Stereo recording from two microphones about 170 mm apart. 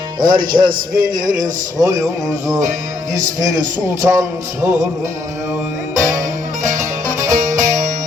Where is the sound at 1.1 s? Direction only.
50° right (ahead or behind).